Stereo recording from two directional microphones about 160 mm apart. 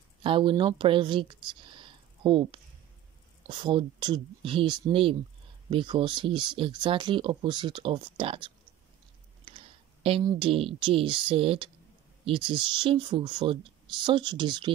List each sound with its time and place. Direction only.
0.2 s speech: 30° right (ahead or behind)
10.2 s speech: 35° right (ahead or behind)